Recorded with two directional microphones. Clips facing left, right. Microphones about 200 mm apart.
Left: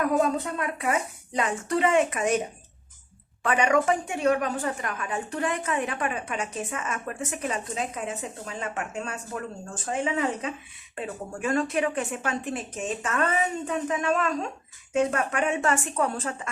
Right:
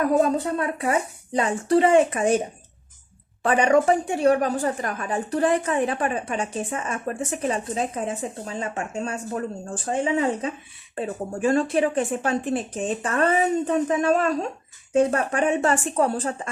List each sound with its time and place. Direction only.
0.0 s a woman's voice: 35° right (ahead or behind)
3.4 s a woman's voice: 35° right (ahead or behind)